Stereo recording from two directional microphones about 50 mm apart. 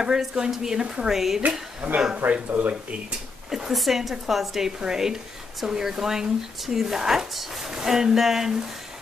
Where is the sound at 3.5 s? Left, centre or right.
Centre.